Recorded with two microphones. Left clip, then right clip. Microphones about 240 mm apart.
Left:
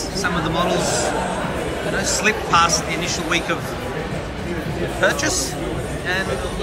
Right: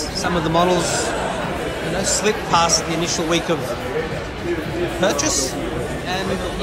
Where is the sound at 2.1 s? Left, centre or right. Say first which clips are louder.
Even; centre.